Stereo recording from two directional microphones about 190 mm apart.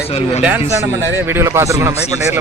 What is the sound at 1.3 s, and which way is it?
Speech, 15° right (ahead or behind).